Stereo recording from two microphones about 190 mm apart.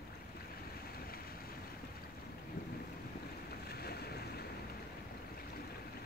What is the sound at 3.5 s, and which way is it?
Boat, 55° left (ahead or behind).